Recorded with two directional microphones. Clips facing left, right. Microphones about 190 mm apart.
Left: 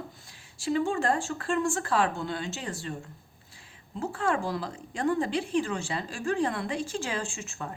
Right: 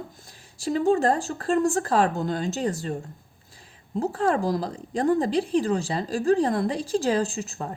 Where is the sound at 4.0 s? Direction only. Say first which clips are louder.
Right 5 dB; 35° right (ahead or behind).